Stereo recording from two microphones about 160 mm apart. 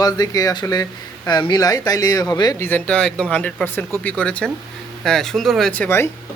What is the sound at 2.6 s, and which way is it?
Speech, 10° left (ahead or behind).